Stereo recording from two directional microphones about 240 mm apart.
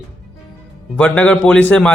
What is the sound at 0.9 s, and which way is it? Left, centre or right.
A man's voice, centre.